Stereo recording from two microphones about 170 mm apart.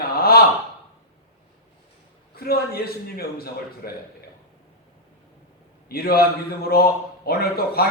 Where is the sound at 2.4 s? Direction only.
65° left (ahead or behind).